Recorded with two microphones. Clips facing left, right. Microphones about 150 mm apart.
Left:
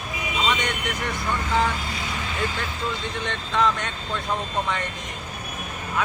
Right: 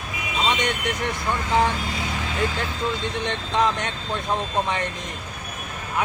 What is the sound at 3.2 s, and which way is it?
Speech, 20° right (ahead or behind).